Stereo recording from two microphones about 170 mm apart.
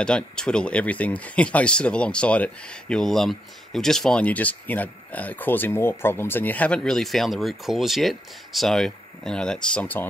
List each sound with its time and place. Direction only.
0.0 s speech: 5° left (ahead or behind)